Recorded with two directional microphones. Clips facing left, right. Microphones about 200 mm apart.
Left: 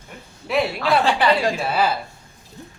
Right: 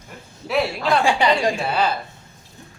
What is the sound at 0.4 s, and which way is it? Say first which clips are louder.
Speech: even; centre (ahead or behind).